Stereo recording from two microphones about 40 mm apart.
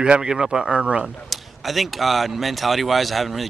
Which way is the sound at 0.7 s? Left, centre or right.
Right.